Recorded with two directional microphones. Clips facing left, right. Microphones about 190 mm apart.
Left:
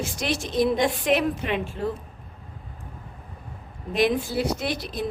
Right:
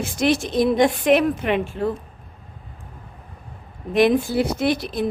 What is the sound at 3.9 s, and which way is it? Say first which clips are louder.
A woman's voice: right 6 dB; 55° right (ahead or behind).